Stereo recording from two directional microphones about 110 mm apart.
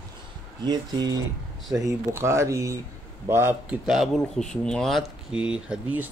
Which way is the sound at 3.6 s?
5° right (ahead or behind).